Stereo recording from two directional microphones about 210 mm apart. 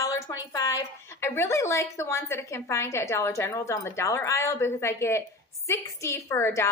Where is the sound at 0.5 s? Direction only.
15° left (ahead or behind).